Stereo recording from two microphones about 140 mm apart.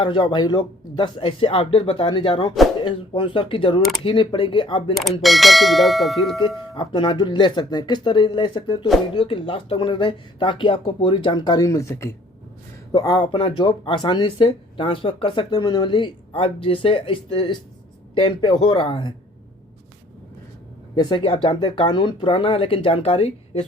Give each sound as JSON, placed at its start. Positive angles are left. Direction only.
{"t": 0.0, "sound": "speech", "side_deg": 35}
{"t": 5.2, "sound": "speech", "side_deg": 0}
{"t": 6.7, "sound": "speech", "side_deg": 35}
{"t": 20.9, "sound": "speech", "side_deg": 30}